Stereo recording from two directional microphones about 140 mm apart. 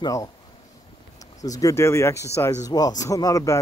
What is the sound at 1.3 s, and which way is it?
A man's voice, 25° left (ahead or behind).